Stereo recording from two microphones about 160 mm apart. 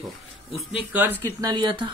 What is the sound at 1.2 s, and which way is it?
Speech, 25° right (ahead or behind).